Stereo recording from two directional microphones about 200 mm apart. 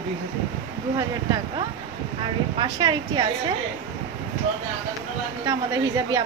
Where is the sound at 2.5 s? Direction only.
20° right (ahead or behind).